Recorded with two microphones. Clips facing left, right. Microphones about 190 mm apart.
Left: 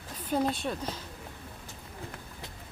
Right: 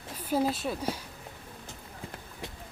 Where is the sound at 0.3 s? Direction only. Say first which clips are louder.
Right 1 dB; 5° right (ahead or behind).